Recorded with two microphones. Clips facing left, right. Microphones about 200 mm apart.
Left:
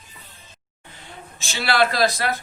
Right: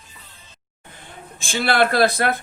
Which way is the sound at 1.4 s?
50° right (ahead or behind).